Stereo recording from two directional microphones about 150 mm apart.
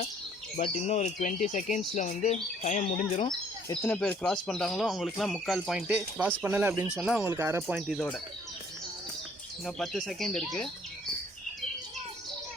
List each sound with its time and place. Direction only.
0.5 s speech: 50° left (ahead or behind)
3.8 s speech: 10° left (ahead or behind); by 7.3 s 5° right (ahead or behind)
7.3 s speech: 20° right (ahead or behind)
7.9 s speech: 5° left (ahead or behind)
9.6 s speech: centre (ahead or behind)